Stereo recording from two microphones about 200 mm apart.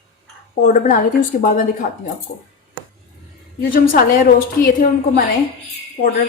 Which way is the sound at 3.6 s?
45° left (ahead or behind).